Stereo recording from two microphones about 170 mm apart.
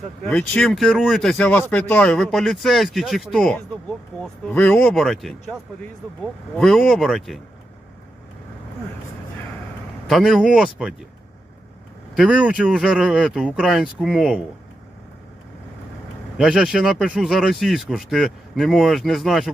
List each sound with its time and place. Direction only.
0.3 s speech: 5° left (ahead or behind)
6.6 s speech: centre (ahead or behind)
10.1 s speech: centre (ahead or behind)
12.1 s speech: 5° right (ahead or behind)
16.4 s speech: 5° right (ahead or behind)